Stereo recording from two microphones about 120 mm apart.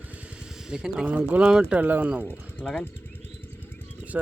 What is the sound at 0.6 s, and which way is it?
Speech, 5° right (ahead or behind).